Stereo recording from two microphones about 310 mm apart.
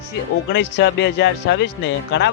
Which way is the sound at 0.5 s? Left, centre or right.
Left.